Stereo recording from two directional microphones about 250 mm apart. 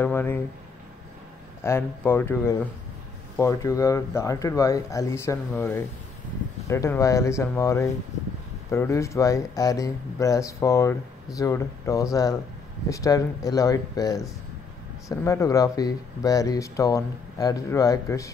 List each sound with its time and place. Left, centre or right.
0.0 s speech: centre
1.6 s speech: centre